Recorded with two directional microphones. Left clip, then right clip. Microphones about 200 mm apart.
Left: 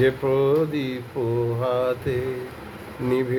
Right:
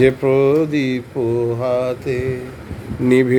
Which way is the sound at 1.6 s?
15° right (ahead or behind).